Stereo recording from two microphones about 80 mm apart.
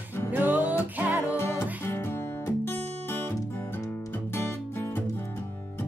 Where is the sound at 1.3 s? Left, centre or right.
Left.